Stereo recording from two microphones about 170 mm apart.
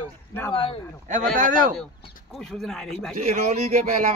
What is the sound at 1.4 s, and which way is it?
Speech, 50° right (ahead or behind).